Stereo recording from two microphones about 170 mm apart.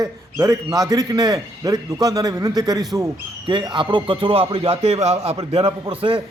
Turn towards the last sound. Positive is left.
turn(degrees=-30)  # may be behind; listen again after turning